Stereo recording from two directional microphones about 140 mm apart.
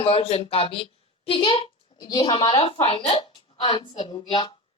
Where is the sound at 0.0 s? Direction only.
40° left (ahead or behind).